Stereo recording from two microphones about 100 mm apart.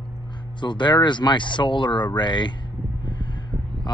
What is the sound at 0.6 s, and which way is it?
Speech, 50° left (ahead or behind).